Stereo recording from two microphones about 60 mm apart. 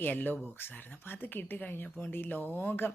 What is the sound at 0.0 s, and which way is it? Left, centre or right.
Speech, left.